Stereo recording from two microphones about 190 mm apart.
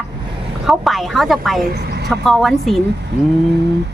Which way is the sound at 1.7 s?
60° right (ahead or behind).